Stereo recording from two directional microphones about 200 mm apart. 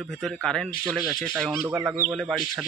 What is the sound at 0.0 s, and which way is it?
Speech, centre (ahead or behind).